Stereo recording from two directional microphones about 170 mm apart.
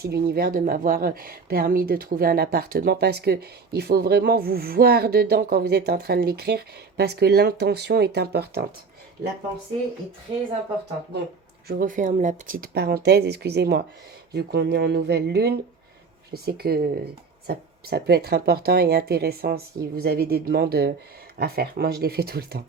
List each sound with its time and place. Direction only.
0.0 s speech: 65° right (ahead or behind)
11.7 s speech: 55° right (ahead or behind)